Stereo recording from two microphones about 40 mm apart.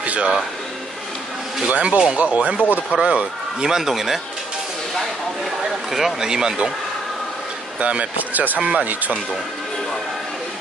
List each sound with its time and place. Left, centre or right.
0.0 s a sound: right
1.7 s a man's voice: right
3.7 s speech: centre
5.9 s speech: centre
6.1 s a man's voice: centre
7.8 s speech: right
8.5 s speech: right